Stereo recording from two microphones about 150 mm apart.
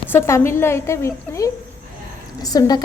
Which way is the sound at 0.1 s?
20° left (ahead or behind).